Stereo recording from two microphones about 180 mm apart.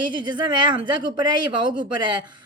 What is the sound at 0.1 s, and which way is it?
A woman's voice, 25° right (ahead or behind).